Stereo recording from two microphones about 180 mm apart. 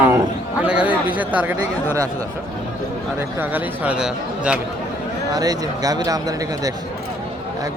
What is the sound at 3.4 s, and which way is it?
Speech, 10° right (ahead or behind).